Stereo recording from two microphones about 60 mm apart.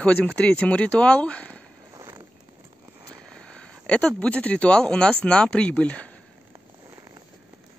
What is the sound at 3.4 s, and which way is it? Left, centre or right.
Speech, centre.